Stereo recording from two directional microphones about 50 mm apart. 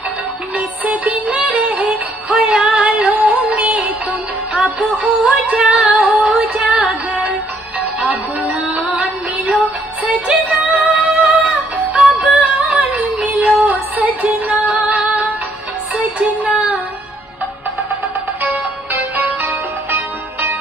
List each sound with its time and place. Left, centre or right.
0.6 s music: right
2.6 s music: centre
3.4 s music: right
4.9 s music: right
5.7 s female singing: right
6.7 s music: centre
7.8 s music: right
19.1 s music: right